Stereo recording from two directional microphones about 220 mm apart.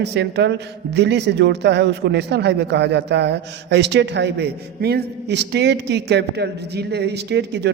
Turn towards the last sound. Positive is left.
turn(degrees=-50)  # may be behind; listen again after turning